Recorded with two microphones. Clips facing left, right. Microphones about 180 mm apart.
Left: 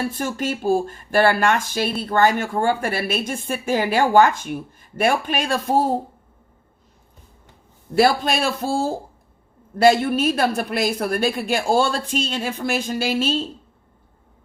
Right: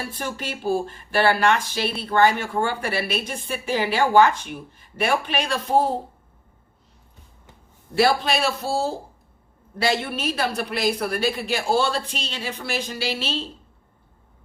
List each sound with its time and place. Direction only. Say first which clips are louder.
0.1 s speech: left 6 dB; 45° left (ahead or behind)
7.9 s speech: left 2 dB; 45° left (ahead or behind)